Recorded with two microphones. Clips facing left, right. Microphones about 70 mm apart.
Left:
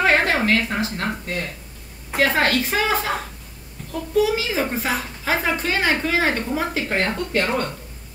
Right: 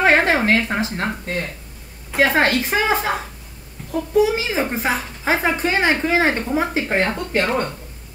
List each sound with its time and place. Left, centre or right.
0.0 s a sound: right
0.7 s speech: right
2.1 s speech: right